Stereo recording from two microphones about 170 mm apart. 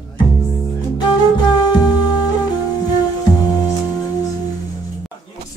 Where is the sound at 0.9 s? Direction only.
25° left (ahead or behind).